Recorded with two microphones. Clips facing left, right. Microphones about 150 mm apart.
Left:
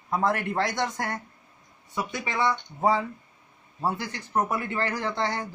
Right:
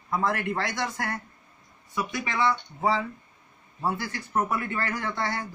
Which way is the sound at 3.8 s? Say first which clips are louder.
Even; 15° left (ahead or behind).